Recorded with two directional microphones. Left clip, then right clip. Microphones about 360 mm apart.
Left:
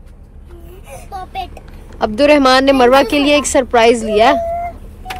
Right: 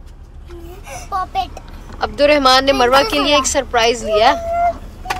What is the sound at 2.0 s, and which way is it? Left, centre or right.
A man's voice, centre.